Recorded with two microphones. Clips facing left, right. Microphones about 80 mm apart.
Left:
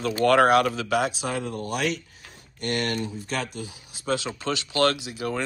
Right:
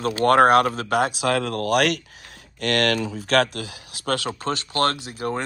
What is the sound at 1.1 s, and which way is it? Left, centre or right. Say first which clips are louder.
Speech: right 7 dB; right.